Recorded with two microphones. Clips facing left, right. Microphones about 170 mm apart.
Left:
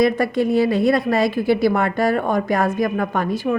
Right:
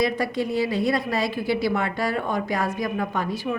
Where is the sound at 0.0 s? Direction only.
55° left (ahead or behind).